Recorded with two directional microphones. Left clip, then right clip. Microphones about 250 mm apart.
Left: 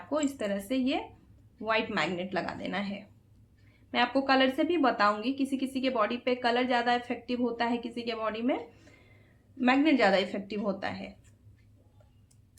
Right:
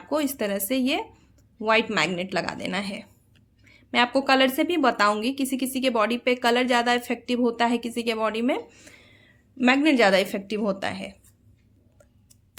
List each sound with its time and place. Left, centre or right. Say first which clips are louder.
0.1 s a woman's voice: right 5 dB; right